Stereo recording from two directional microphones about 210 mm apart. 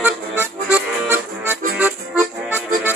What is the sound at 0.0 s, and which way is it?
Music, 10° right (ahead or behind).